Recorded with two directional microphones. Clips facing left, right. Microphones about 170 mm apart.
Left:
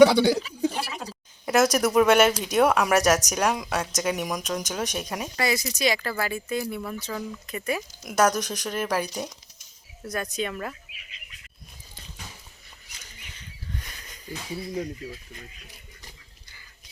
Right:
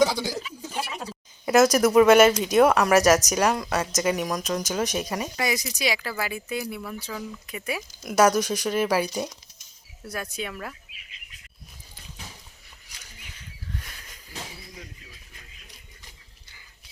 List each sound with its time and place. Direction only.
0.0 s speech: 65° left (ahead or behind)
1.5 s speech: centre (ahead or behind)
5.4 s speech: 15° right (ahead or behind)
13.7 s a sound: centre (ahead or behind)